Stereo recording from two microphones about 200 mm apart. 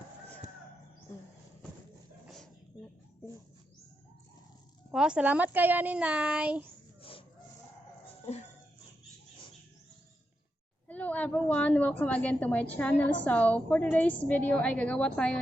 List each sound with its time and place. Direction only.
2.2 s a sound: centre (ahead or behind)
4.9 s a child's voice: 5° right (ahead or behind)
7.0 s chicken: 25° left (ahead or behind)
8.2 s dog: 30° left (ahead or behind)
10.8 s a woman's voice: 5° left (ahead or behind)